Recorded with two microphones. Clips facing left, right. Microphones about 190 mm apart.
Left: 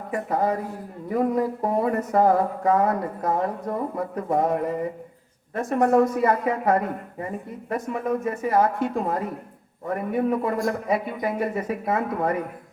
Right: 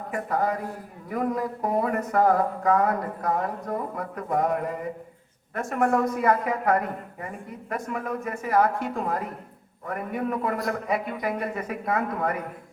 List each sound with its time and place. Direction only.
0.1 s a man's voice: 25° left (ahead or behind)
5.5 s a man's voice: 30° left (ahead or behind)